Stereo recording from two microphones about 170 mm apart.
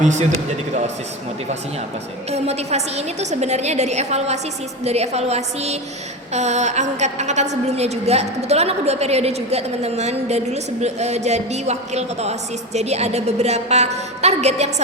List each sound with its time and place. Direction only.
0.0 s a man's voice: 45° right (ahead or behind)
2.3 s a woman's voice: 40° right (ahead or behind)